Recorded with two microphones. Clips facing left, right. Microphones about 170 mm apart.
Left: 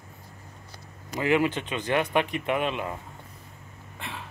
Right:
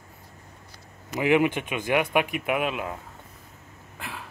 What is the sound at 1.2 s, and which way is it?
Speech, 15° right (ahead or behind).